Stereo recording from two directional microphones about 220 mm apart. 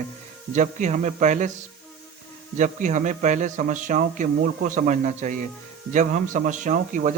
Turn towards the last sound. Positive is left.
turn(degrees=-35)  # may be behind; listen again after turning